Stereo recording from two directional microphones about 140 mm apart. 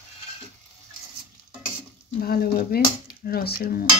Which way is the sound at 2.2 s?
90° left.